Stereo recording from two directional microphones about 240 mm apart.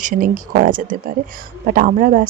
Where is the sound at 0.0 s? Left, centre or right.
Right.